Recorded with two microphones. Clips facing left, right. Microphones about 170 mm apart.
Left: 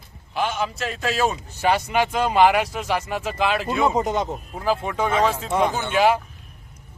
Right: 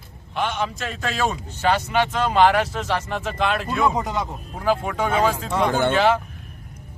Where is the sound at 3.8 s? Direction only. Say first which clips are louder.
Left 2 dB; 20° left (ahead or behind).